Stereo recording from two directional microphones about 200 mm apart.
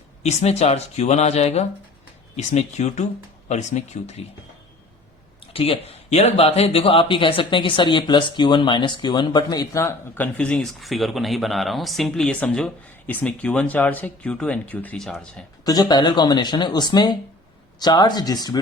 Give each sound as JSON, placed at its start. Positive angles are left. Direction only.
{"t": 0.2, "sound": "speech", "side_deg": 35}
{"t": 5.5, "sound": "speech", "side_deg": 30}
{"t": 15.6, "sound": "speech", "side_deg": 20}